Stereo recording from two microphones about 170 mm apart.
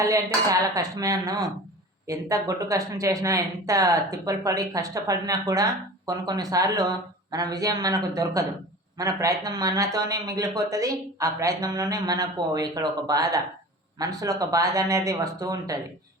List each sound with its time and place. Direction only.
0.0 s speech: 20° right (ahead or behind)